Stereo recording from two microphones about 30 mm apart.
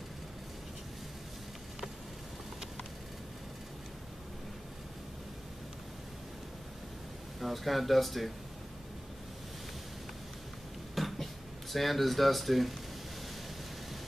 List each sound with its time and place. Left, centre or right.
7.3 s speech: centre
11.0 s a sound: centre
11.7 s speech: centre